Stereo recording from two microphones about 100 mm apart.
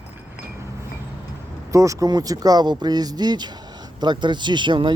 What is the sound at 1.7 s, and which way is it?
Speech, 30° right (ahead or behind).